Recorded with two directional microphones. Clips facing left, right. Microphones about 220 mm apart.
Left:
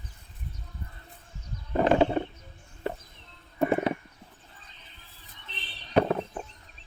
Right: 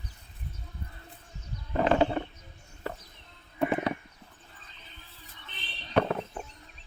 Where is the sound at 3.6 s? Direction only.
25° left (ahead or behind).